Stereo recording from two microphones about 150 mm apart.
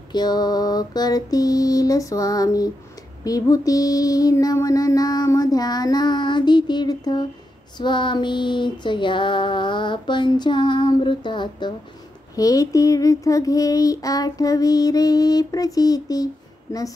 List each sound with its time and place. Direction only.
0.1 s child singing: 25° left (ahead or behind)
7.7 s female singing: 30° left (ahead or behind)
12.4 s child singing: 20° left (ahead or behind)